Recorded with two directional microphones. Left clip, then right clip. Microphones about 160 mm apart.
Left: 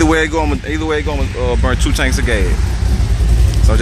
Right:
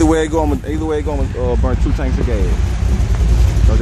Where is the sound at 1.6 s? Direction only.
5° left (ahead or behind).